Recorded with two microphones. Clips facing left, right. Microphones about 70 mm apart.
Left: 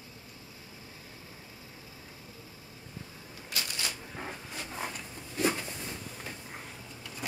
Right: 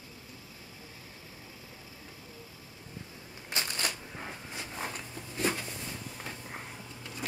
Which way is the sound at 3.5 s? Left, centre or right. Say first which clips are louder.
Right 3 dB; right.